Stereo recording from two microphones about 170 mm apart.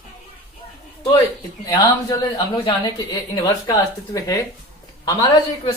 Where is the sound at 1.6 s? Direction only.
20° left (ahead or behind).